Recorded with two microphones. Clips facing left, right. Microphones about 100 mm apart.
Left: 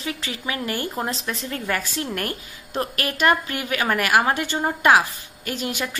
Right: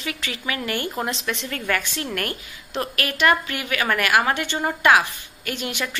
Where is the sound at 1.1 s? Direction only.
40° left (ahead or behind).